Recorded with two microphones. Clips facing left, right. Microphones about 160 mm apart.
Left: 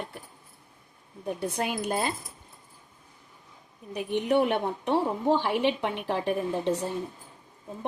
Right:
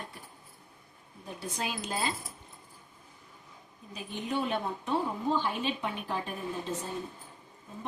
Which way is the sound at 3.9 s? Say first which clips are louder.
Left 9 dB; 75° left (ahead or behind).